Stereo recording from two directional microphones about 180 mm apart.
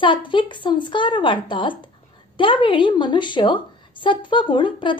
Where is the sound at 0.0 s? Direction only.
30° left (ahead or behind).